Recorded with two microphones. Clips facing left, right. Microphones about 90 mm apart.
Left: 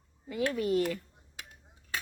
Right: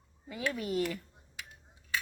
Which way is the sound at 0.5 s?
10° right (ahead or behind).